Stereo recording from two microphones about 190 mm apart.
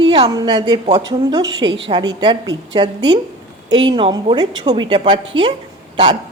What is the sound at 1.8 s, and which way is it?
A woman's voice, 25° right (ahead or behind).